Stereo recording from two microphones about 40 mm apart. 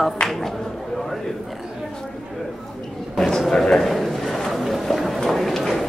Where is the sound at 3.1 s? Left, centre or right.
Centre.